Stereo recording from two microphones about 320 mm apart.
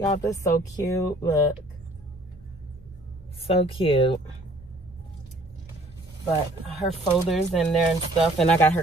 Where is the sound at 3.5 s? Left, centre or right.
Centre.